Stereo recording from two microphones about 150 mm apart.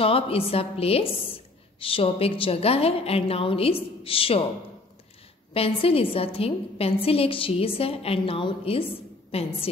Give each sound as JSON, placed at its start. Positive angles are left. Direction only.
{"t": 0.0, "sound": "a woman's voice", "side_deg": 40}
{"t": 5.5, "sound": "a woman's voice", "side_deg": 40}